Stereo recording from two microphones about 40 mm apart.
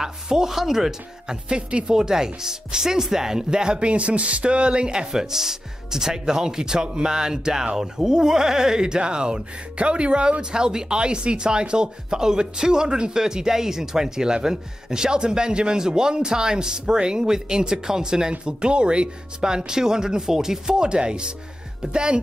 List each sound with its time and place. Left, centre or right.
0.0 s speech: centre
1.5 s speech: right
2.0 s speech: centre